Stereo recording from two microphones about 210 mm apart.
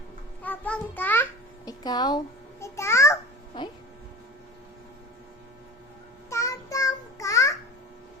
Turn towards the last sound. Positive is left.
turn(degrees=15)  # may be behind; listen again after turning